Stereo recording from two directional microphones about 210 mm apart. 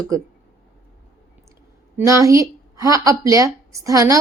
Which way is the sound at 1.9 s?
15° right (ahead or behind).